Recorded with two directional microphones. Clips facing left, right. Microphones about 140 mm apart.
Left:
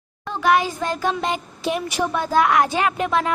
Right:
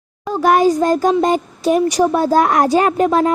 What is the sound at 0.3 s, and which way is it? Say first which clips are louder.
A woman's voice: right 6 dB; 40° right (ahead or behind).